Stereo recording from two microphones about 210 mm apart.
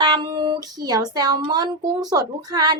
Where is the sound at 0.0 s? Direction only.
20° right (ahead or behind).